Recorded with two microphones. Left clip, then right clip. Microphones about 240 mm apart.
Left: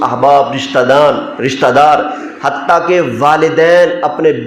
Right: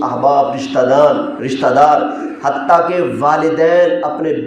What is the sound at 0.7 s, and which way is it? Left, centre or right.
A man's voice, left.